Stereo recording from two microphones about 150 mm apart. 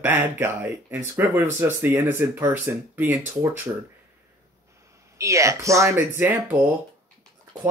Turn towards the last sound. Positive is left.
turn(degrees=-10)  # may be behind; listen again after turning